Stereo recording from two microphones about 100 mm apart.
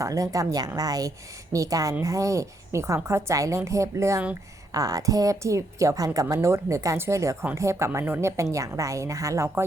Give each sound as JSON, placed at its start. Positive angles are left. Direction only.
{"t": 0.0, "sound": "a woman's voice", "side_deg": -35}